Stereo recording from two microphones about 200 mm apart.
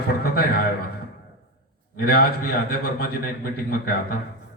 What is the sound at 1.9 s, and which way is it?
A man's voice, 50° left (ahead or behind).